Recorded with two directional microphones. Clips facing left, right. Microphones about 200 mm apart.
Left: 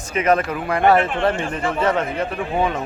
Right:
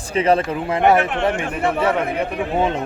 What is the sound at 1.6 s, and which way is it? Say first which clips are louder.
Speech: right 3 dB; 65° right (ahead or behind).